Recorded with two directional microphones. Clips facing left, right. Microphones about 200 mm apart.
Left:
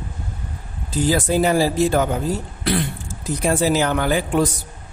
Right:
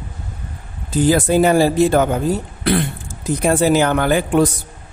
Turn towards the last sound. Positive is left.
turn(degrees=-55)  # may be behind; listen again after turning